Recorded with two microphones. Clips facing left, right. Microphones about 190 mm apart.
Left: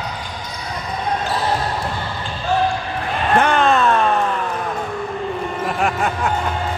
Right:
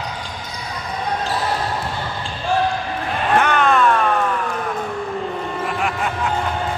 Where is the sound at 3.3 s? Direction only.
30° left (ahead or behind).